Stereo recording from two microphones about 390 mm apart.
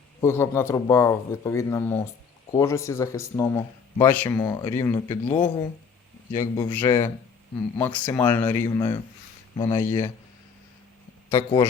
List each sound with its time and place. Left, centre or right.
0.2 s speech: centre
11.3 s speech: centre